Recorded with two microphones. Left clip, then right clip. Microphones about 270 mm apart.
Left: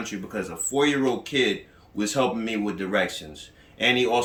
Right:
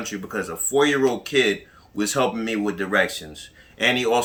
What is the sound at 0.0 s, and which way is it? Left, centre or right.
Speech, centre.